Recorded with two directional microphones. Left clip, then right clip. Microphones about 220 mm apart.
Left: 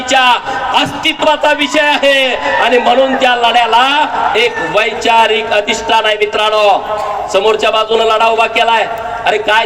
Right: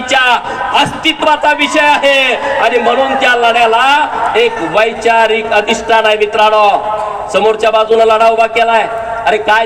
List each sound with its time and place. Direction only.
0.1 s a man's voice: 30° left (ahead or behind)